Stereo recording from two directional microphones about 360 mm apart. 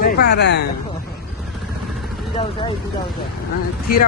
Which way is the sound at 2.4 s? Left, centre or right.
Centre.